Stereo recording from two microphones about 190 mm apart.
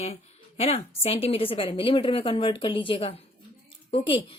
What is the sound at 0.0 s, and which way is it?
A woman's voice, 35° left (ahead or behind).